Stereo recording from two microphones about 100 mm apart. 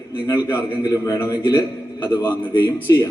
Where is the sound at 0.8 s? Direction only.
35° left (ahead or behind).